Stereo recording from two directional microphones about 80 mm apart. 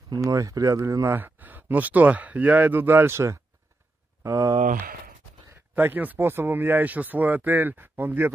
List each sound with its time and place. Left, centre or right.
0.2 s speech: right
1.1 s speech: right
5.8 s speech: right